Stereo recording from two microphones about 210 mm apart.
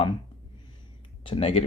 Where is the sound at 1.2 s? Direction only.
25° left (ahead or behind).